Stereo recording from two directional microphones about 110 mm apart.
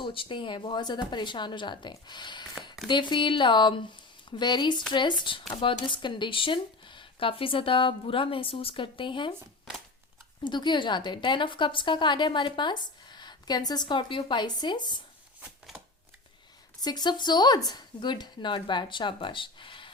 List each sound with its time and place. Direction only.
0.0 s a woman's voice: 50° left (ahead or behind)
10.4 s a woman's voice: 45° left (ahead or behind)
15.4 s shuffling cards: 5° right (ahead or behind)
16.8 s a woman's voice: 40° left (ahead or behind)